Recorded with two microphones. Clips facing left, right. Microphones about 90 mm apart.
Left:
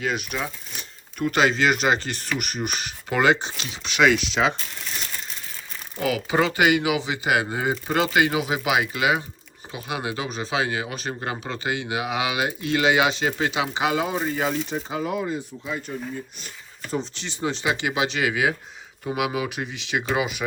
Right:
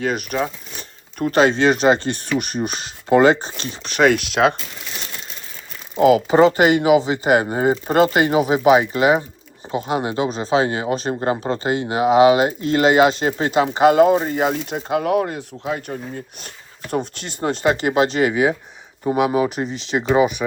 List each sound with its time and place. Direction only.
0.0 s speech: 45° right (ahead or behind)
6.0 s speech: 30° right (ahead or behind); by 14.6 s 45° right (ahead or behind)
14.6 s speech: 65° right (ahead or behind); by 20.0 s 35° right (ahead or behind)